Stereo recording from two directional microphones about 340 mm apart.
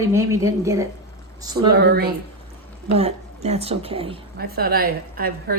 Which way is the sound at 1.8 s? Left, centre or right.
Right.